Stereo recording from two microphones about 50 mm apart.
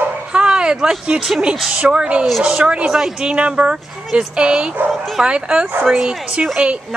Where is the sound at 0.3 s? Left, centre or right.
Centre.